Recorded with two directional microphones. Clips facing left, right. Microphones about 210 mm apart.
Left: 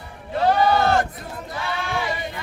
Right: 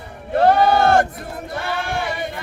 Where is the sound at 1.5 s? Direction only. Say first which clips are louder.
Right 2 dB; 55° right (ahead or behind).